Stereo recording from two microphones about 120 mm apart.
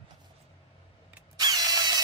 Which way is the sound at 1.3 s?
35° right (ahead or behind).